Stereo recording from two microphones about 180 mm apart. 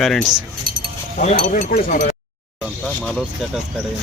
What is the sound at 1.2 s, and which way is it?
Speech, 45° left (ahead or behind).